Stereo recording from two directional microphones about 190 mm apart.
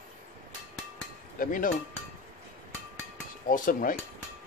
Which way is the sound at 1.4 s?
45° left (ahead or behind).